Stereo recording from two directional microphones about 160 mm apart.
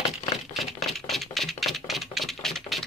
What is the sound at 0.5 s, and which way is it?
Typewriter, centre (ahead or behind).